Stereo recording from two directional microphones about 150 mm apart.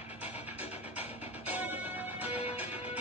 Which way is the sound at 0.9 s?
10° right (ahead or behind).